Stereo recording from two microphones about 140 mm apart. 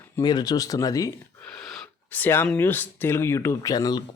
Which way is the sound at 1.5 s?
5° left (ahead or behind).